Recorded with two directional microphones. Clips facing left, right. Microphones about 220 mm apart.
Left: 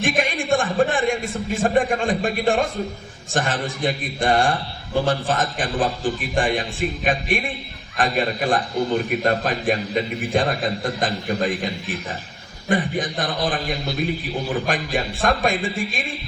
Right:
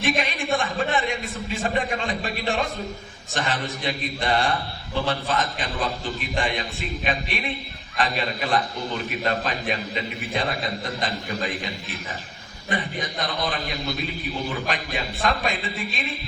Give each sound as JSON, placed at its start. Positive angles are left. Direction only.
{"t": 0.2, "sound": "a man's voice", "side_deg": 50}